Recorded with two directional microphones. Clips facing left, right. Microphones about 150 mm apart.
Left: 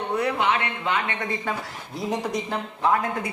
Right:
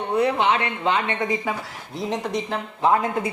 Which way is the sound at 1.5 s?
10° right (ahead or behind).